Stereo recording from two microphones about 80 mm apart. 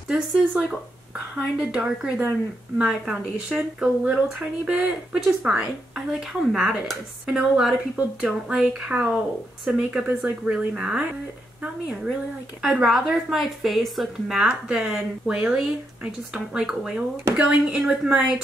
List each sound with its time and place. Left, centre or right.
0.1 s speech: centre
5.1 s speech: centre